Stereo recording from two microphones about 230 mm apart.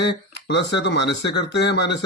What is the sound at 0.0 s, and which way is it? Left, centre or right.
Speech, left.